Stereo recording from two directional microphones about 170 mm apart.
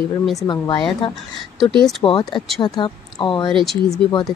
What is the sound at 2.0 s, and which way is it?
A woman's voice, 30° left (ahead or behind).